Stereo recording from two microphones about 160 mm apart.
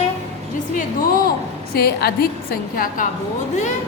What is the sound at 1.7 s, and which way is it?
A woman's voice, 75° left (ahead or behind).